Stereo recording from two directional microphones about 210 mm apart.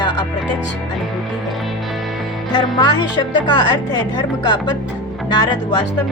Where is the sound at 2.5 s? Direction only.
20° left (ahead or behind).